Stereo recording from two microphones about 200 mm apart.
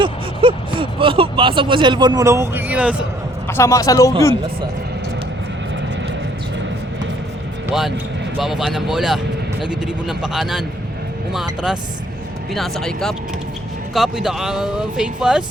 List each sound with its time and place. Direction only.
0.0 s speech: 25° right (ahead or behind); by 3.1 s 5° right (ahead or behind)
3.4 s speech: 15° left (ahead or behind)
7.7 s speech: centre (ahead or behind)